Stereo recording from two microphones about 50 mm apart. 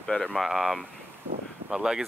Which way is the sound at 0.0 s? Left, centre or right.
Centre.